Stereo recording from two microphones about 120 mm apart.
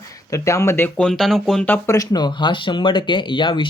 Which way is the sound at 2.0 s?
35° left (ahead or behind).